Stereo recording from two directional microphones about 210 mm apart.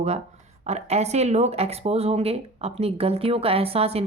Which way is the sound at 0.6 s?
30° right (ahead or behind).